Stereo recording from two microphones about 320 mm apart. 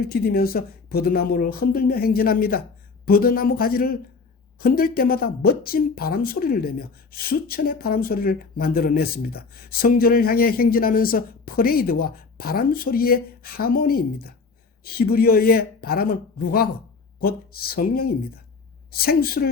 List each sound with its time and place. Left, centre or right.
0.0 s speech: left